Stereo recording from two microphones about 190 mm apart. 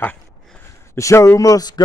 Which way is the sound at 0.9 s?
15° left (ahead or behind).